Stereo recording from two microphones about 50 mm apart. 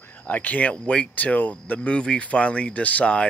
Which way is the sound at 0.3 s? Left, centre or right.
Left.